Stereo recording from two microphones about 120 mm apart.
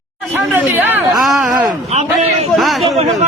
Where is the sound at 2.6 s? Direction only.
Centre (ahead or behind).